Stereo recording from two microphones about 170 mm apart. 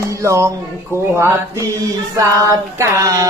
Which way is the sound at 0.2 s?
15° right (ahead or behind).